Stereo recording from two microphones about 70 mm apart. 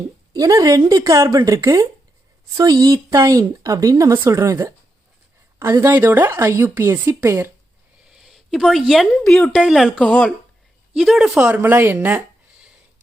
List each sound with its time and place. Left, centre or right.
0.3 s speech: right
2.6 s speech: right
3.2 s speech: right
8.1 s a sound: centre
9.2 s speech: centre
9.6 s speech: centre
10.0 s speech: centre
10.9 s speech: centre
11.3 s speech: right